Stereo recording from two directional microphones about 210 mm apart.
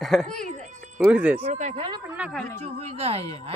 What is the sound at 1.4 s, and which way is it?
Speech, 30° right (ahead or behind).